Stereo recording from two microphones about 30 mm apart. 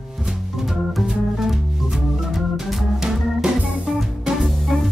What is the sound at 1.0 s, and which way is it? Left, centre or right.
Music, centre.